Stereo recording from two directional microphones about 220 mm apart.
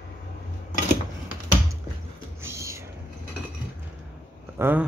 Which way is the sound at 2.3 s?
10° right (ahead or behind).